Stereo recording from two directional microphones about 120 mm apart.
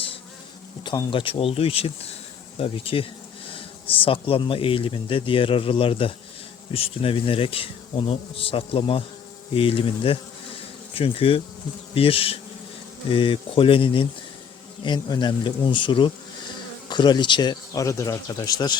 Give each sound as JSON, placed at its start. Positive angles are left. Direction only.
{"t": 0.9, "sound": "speech", "side_deg": 45}